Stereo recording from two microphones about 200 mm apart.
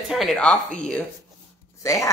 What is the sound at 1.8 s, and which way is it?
Speech, 15° left (ahead or behind).